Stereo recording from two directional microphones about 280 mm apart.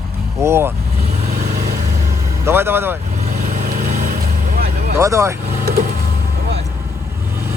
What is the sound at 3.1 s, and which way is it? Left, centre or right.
Vehicle, right.